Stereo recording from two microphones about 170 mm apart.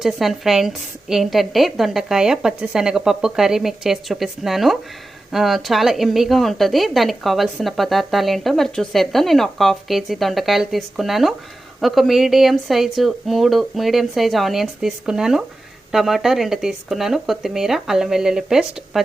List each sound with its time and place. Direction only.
0.0 s speech: centre (ahead or behind)